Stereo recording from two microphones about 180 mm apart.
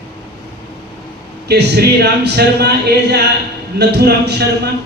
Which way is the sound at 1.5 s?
65° right (ahead or behind).